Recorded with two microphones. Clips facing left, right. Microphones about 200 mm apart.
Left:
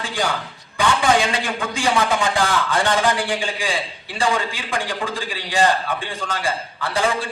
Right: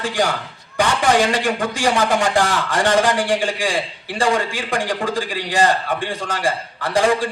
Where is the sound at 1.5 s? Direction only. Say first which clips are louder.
Right 3 dB; 40° right (ahead or behind).